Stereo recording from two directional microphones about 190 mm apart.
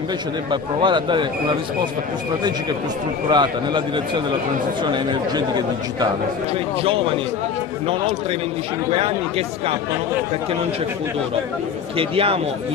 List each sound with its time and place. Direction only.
0.5 s a man's voice: 25° right (ahead or behind)
3.3 s a man's voice: 25° right (ahead or behind)
12.0 s a man's voice: 30° right (ahead or behind)